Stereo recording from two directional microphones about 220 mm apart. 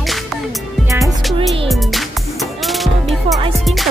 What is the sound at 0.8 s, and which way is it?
Music, 15° right (ahead or behind).